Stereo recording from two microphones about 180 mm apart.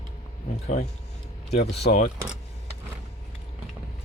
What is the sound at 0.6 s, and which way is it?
Speech, 40° left (ahead or behind).